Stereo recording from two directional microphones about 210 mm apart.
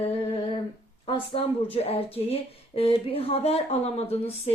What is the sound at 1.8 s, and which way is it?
Speech, 30° left (ahead or behind).